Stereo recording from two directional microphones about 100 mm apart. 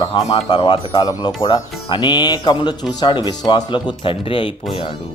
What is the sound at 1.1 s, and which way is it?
Speech, 45° left (ahead or behind).